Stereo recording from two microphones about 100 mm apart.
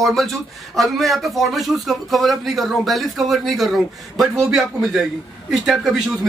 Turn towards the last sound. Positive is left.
turn(degrees=-5)  # may be behind; listen again after turning